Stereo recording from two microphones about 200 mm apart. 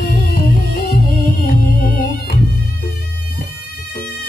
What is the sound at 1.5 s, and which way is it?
Music, 45° left (ahead or behind).